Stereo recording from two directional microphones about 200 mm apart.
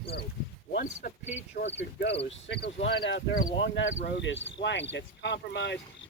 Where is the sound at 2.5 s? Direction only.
60° left (ahead or behind).